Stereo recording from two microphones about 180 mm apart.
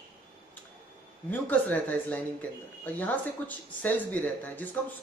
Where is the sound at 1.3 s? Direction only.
10° left (ahead or behind).